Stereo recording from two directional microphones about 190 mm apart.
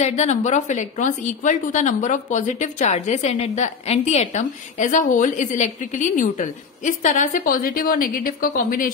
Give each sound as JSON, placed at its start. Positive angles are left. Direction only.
{"t": 0.0, "sound": "a woman's voice", "side_deg": 35}